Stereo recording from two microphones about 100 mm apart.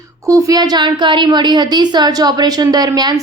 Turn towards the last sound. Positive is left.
turn(degrees=-40)  # may be behind; listen again after turning